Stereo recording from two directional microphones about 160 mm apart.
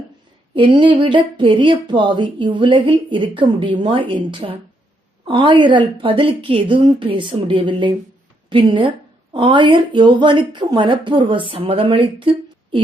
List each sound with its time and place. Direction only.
0.5 s speech: 30° right (ahead or behind)